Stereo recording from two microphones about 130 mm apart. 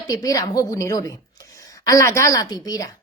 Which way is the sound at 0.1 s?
25° left (ahead or behind).